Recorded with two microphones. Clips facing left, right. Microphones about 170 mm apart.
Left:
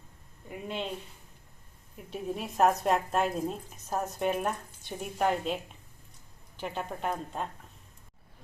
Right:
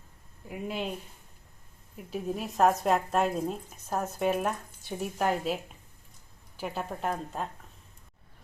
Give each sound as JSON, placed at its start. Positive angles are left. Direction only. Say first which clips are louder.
{"t": 0.4, "sound": "speech", "louder": "right 2 dB", "side_deg": -5}
{"t": 2.0, "sound": "speech", "louder": "right 2 dB", "side_deg": 0}
{"t": 6.6, "sound": "speech", "louder": "right 1 dB", "side_deg": -5}